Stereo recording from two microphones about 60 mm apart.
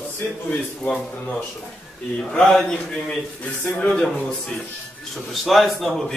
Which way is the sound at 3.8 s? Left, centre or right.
Centre.